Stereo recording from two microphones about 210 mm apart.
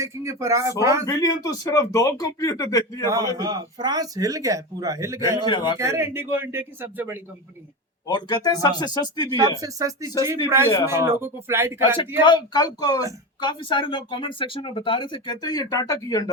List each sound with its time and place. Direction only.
0.0 s speech: 15° right (ahead or behind)
1.0 s speech: 15° left (ahead or behind)
3.1 s speech: 15° right (ahead or behind)
5.4 s speech: 20° left (ahead or behind)
5.8 s speech: 15° right (ahead or behind)
8.0 s speech: 20° left (ahead or behind)
9.3 s speech: 15° right (ahead or behind)
12.2 s speech: 20° left (ahead or behind)